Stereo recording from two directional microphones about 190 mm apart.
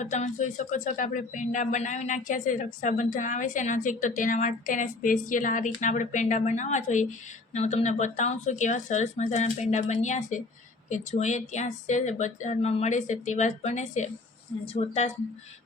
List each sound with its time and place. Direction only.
0.0 s a woman's voice: 40° left (ahead or behind)